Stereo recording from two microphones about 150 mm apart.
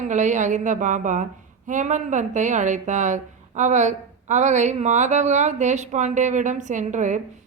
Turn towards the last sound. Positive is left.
turn(degrees=-55)  # may be behind; listen again after turning